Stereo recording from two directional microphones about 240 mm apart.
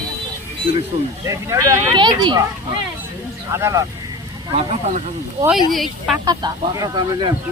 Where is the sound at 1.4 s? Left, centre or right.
Centre.